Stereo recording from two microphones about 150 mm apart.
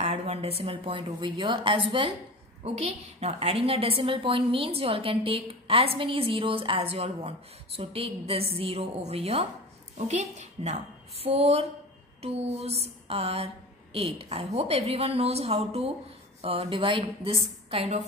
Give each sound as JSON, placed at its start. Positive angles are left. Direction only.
{"t": 0.0, "sound": "a woman's voice", "side_deg": -45}
{"t": 2.6, "sound": "a woman's voice", "side_deg": -45}